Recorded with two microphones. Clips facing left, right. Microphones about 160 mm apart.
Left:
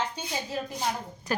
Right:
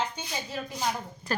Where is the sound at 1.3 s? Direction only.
15° left (ahead or behind).